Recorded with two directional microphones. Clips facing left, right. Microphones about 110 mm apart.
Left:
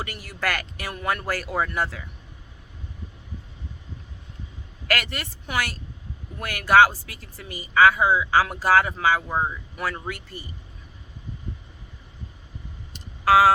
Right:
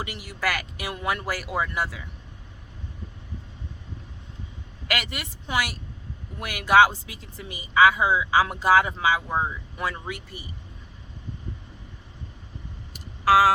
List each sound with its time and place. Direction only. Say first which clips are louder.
0.0 s speech: even; 15° right (ahead or behind)
4.9 s speech: left 3 dB; 15° right (ahead or behind)
13.2 s a sound: left 1 dB; centre (ahead or behind)